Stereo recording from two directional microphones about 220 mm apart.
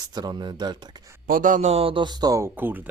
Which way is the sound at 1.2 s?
40° right (ahead or behind).